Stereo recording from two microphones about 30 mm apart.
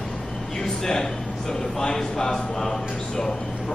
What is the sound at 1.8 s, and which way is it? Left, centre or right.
Speech, left.